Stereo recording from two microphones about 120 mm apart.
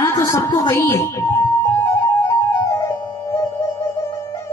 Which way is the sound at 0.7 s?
20° left (ahead or behind).